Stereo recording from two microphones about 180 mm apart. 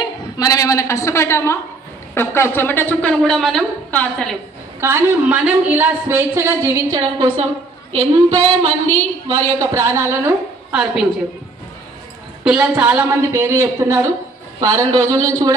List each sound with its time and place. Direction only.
0.0 s a woman's voice: 20° left (ahead or behind)
4.7 s a woman's voice: 15° right (ahead or behind); by 8.4 s 35° right (ahead or behind)
9.3 s a woman's voice: 15° right (ahead or behind)
12.4 s a woman's voice: 10° right (ahead or behind)